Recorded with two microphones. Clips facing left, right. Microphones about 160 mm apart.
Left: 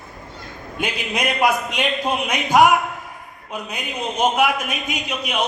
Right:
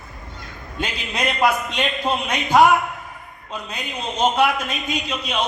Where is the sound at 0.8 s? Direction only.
15° left (ahead or behind).